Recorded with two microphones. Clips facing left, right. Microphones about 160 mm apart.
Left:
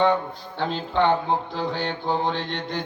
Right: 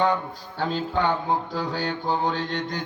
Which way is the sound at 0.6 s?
40° right (ahead or behind).